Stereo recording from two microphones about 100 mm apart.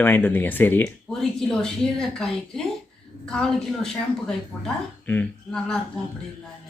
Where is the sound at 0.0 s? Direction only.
20° left (ahead or behind).